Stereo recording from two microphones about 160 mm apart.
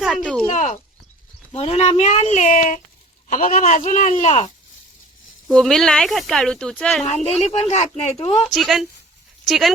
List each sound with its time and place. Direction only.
0.2 s a sound: 5° left (ahead or behind)
0.5 s a sound: 50° left (ahead or behind)
1.5 s speech: 40° left (ahead or behind)
5.5 s speech: 5° left (ahead or behind)
7.0 s speech: 45° left (ahead or behind)
8.5 s speech: centre (ahead or behind)